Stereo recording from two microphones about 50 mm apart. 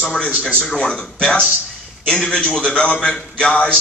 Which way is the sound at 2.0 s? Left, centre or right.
Centre.